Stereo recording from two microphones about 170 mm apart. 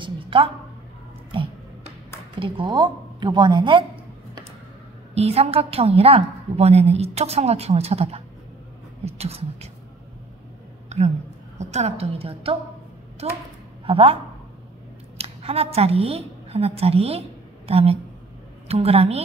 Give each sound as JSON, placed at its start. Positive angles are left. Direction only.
{"t": 0.0, "sound": "a sound", "side_deg": -30}
{"t": 2.3, "sound": "speech", "side_deg": -30}
{"t": 5.1, "sound": "a woman's voice", "side_deg": -35}
{"t": 10.9, "sound": "a sound", "side_deg": -40}
{"t": 11.5, "sound": "a woman's voice", "side_deg": -40}
{"t": 13.8, "sound": "speech", "side_deg": -35}
{"t": 15.1, "sound": "a woman's voice", "side_deg": -35}